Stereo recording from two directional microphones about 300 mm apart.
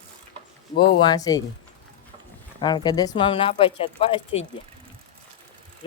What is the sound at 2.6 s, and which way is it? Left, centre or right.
Speech, centre.